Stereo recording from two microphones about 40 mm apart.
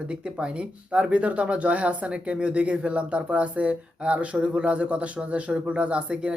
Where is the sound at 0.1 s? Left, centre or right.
Right.